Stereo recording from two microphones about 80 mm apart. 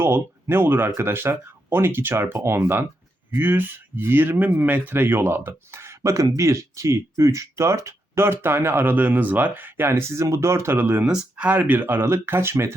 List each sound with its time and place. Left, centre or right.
0.0 s speech: right
11.0 s speech: centre; by 12.7 s right